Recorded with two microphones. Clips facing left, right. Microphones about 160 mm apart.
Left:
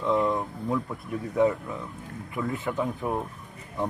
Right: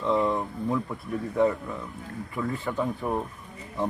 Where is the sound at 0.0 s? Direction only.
Centre (ahead or behind).